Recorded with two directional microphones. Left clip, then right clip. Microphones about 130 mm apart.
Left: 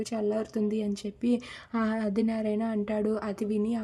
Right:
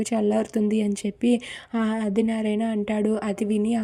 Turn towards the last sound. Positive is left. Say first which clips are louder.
# right 5 dB
turn(degrees=-25)  # may be behind; listen again after turning